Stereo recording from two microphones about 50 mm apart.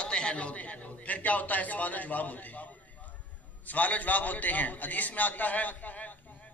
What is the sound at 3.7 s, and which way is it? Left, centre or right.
A man's voice, left.